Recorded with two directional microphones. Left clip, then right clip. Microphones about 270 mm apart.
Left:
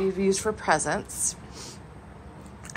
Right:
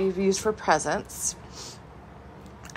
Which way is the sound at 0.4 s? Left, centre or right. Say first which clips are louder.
Right 1 dB; centre.